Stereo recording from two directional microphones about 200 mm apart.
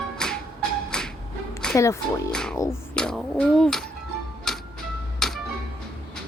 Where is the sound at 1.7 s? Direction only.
15° left (ahead or behind).